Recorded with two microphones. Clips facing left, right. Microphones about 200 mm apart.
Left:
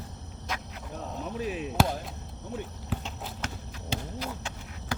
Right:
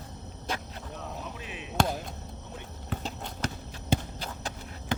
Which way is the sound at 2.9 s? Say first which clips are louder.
Left 1 dB; 5° left (ahead or behind).